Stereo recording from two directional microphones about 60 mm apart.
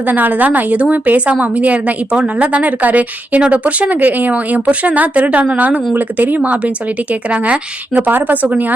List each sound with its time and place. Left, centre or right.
0.1 s a woman's voice: right